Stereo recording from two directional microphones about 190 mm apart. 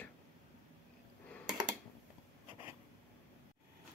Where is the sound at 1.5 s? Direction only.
20° right (ahead or behind).